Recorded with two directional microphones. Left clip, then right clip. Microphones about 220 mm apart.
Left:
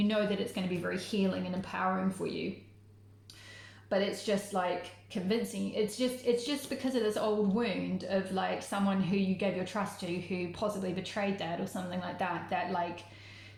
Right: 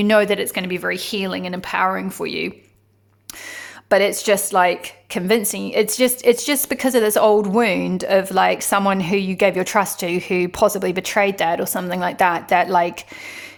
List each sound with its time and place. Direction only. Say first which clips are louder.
0.0 s speech: right 16 dB; 45° right (ahead or behind)
3.8 s a woman's voice: right 16 dB; 45° right (ahead or behind)